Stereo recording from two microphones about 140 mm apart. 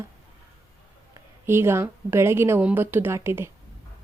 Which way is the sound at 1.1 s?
15° right (ahead or behind).